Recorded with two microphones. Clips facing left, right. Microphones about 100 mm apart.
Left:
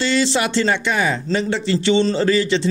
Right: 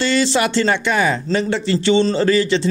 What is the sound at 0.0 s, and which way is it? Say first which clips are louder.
Speech: right 2 dB; 55° right (ahead or behind).